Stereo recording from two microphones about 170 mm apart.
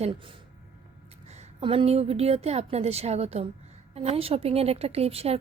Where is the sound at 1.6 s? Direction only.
35° right (ahead or behind).